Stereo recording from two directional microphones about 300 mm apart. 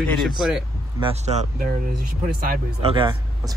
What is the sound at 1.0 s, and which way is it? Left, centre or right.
Speech, right.